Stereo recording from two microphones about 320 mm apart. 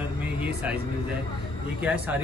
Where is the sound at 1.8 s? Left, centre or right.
Centre.